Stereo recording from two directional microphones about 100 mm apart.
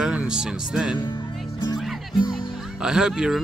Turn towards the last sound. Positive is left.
turn(degrees=-5)  # may be behind; listen again after turning